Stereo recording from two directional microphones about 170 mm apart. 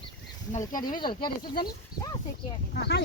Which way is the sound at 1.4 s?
60° left (ahead or behind).